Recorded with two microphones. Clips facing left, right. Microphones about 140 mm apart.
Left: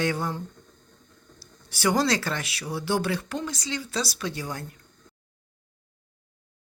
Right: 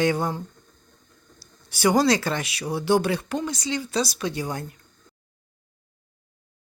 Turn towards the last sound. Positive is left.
turn(degrees=-20)  # may be behind; listen again after turning